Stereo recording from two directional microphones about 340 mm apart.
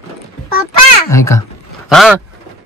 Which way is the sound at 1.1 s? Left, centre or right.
Centre.